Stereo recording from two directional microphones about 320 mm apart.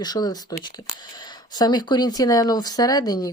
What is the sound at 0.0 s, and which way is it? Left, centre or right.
Speech, centre.